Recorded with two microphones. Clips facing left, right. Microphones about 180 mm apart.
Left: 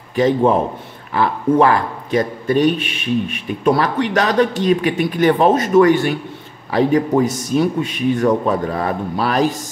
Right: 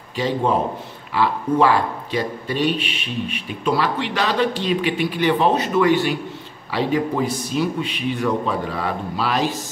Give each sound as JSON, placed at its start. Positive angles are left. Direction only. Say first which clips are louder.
{"t": 1.1, "sound": "speech", "louder": "left 4 dB", "side_deg": 50}